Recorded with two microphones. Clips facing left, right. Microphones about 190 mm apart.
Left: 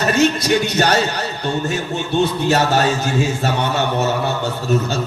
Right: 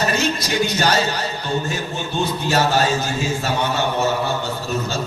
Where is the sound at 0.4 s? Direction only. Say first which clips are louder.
Left 3 dB; 65° left (ahead or behind).